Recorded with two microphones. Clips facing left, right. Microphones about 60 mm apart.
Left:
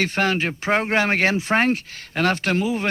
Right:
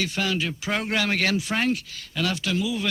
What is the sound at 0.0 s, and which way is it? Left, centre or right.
Speech, left.